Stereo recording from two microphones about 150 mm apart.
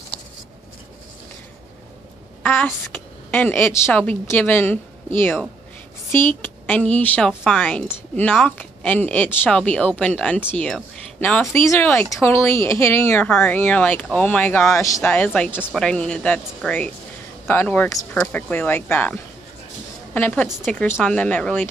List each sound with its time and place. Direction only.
2.4 s a woman's voice: 10° left (ahead or behind)
11.4 s speech: 20° left (ahead or behind)